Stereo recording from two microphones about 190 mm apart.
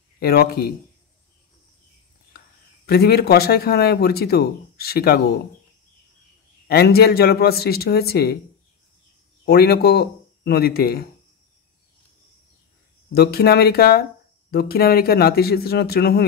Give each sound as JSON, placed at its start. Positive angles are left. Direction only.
{"t": 0.2, "sound": "speech", "side_deg": 55}
{"t": 2.9, "sound": "speech", "side_deg": 55}
{"t": 6.7, "sound": "speech", "side_deg": 55}
{"t": 9.5, "sound": "speech", "side_deg": 55}
{"t": 13.1, "sound": "speech", "side_deg": 55}